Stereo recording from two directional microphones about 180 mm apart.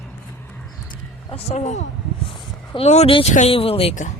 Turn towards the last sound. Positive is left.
turn(degrees=30)  # may be behind; listen again after turning